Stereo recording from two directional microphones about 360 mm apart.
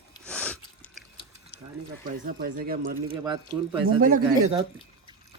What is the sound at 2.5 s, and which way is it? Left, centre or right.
Speech, right.